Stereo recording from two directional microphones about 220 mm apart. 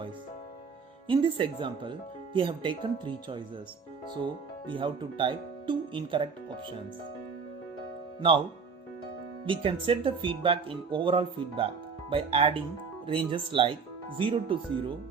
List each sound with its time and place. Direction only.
1.0 s speech: 20° right (ahead or behind)
4.8 s speech: 25° right (ahead or behind)
9.5 s speech: 25° right (ahead or behind)